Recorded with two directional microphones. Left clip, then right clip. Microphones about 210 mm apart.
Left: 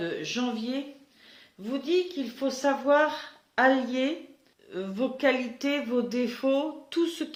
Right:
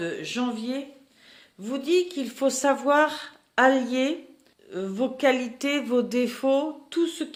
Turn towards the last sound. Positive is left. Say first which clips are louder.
# right 2 dB
turn(degrees=-20)  # may be behind; listen again after turning